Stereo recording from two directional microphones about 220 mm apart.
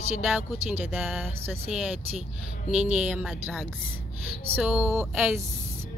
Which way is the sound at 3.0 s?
5° right (ahead or behind).